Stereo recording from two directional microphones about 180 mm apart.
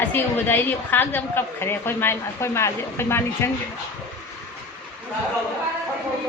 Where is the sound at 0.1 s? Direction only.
10° left (ahead or behind).